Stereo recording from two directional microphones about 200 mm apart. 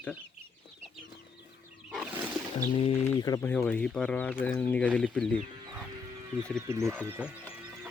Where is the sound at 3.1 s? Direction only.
20° left (ahead or behind).